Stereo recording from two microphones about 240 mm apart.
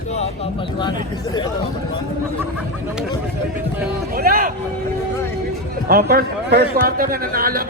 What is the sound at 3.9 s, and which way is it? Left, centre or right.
Speech, right.